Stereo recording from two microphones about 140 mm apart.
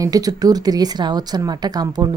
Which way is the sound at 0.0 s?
25° right (ahead or behind).